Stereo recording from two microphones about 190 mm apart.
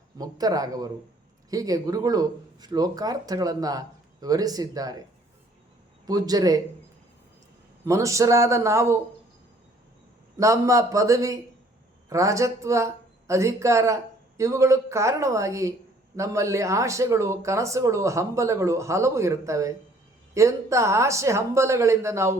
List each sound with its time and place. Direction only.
0.2 s speech: 20° right (ahead or behind)
6.1 s speech: 20° right (ahead or behind)
7.9 s speech: 15° right (ahead or behind)
10.3 s speech: 15° right (ahead or behind)